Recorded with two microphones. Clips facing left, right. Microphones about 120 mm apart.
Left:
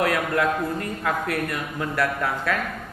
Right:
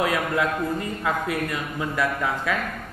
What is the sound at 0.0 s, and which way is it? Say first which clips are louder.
A man's voice: left 1 dB; 10° right (ahead or behind).